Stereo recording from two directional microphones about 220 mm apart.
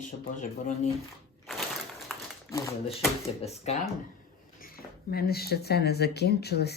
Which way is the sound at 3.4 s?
30° left (ahead or behind).